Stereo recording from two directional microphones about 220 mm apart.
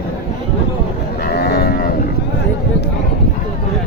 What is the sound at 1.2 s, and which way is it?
Cattle, 45° left (ahead or behind).